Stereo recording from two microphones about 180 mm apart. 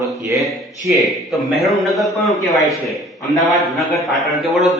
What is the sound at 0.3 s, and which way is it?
A man's voice, centre (ahead or behind).